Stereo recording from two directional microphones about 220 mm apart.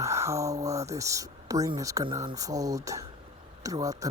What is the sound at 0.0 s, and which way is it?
Speech, 15° right (ahead or behind).